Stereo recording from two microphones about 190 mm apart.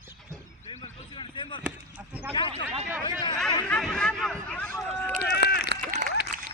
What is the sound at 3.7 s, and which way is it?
Speech, 5° left (ahead or behind).